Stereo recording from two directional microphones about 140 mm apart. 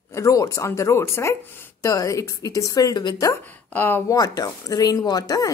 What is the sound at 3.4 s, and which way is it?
Speech, 15° left (ahead or behind).